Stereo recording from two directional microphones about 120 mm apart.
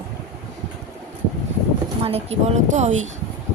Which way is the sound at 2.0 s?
55° right (ahead or behind).